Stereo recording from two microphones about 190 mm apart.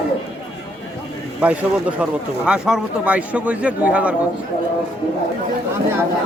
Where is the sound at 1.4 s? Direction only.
5° right (ahead or behind).